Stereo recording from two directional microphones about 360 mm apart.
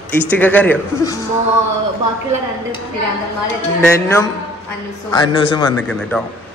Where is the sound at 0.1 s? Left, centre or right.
Centre.